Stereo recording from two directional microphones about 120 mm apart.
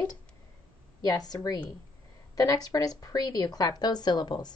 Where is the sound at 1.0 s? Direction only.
30° left (ahead or behind).